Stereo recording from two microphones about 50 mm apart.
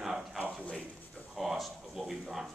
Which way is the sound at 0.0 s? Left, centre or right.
Centre.